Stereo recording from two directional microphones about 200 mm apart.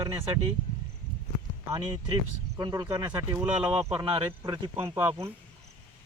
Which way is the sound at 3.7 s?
30° right (ahead or behind).